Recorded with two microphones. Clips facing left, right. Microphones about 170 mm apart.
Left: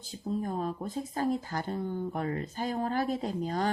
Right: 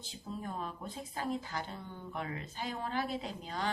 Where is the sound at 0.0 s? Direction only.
40° left (ahead or behind).